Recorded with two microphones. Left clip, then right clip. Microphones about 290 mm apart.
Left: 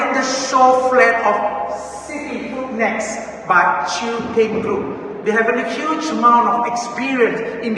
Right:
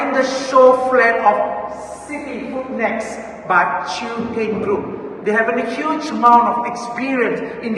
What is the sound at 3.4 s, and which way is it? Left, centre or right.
Speech, centre.